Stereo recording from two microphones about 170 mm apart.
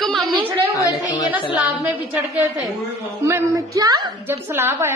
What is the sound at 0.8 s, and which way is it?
Speech, 20° left (ahead or behind).